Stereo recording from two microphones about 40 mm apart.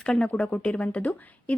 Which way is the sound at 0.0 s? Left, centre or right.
Left.